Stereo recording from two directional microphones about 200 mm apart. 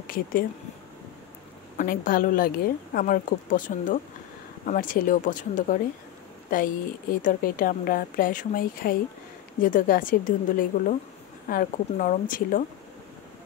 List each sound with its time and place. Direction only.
0.0 s speech: 45° left (ahead or behind)
1.8 s a woman's voice: 45° left (ahead or behind)
7.2 s a woman's voice: 45° left (ahead or behind)